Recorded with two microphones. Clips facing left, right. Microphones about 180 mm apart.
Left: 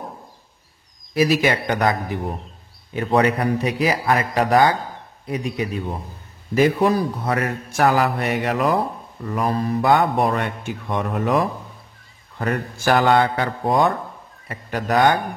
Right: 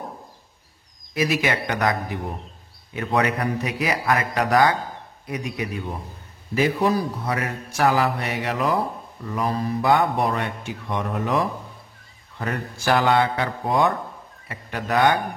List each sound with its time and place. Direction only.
1.1 s a man's voice: 35° left (ahead or behind)
7.2 s speech: 50° left (ahead or behind)